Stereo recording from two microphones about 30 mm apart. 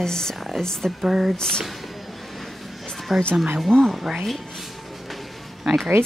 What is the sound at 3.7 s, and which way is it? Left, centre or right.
Speech, left.